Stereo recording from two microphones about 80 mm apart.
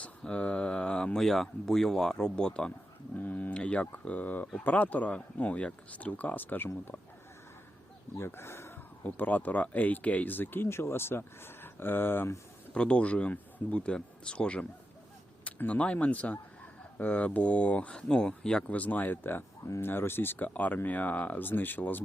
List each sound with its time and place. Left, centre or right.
0.0 s speech: centre
3.2 s speech: left
8.1 s speech: left
12.7 s speech: centre
19.6 s speech: left
19.9 s speech: left